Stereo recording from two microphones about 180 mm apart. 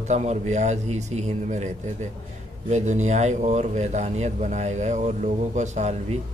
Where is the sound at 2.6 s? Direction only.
40° right (ahead or behind).